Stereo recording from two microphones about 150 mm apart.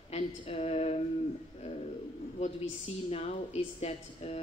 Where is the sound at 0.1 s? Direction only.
45° left (ahead or behind).